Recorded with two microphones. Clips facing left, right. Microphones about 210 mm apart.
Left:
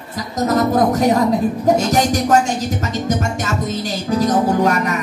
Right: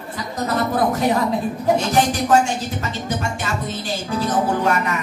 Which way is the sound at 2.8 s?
40° left (ahead or behind).